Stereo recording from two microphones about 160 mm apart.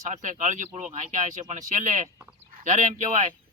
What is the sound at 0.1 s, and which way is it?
A man's voice, 50° right (ahead or behind).